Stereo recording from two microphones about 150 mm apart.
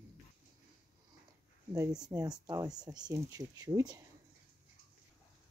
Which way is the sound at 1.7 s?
25° right (ahead or behind).